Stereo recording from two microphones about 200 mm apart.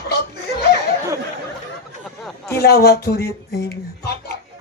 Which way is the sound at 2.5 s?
55° left (ahead or behind).